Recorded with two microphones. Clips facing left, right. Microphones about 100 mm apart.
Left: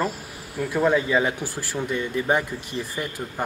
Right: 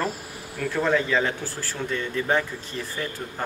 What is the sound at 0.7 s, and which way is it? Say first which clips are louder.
Speech: left 2 dB; 15° left (ahead or behind).